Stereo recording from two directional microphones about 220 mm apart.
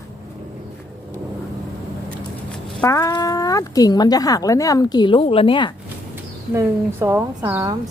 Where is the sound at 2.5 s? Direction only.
10° left (ahead or behind).